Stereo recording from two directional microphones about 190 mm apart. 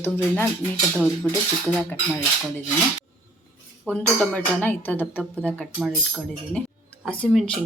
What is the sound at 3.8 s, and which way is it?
A woman's voice, 5° left (ahead or behind).